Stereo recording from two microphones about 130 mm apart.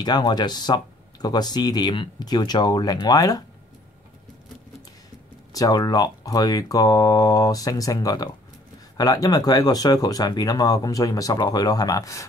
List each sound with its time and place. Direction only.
0.0 s speech: 35° left (ahead or behind)
5.5 s speech: 30° left (ahead or behind)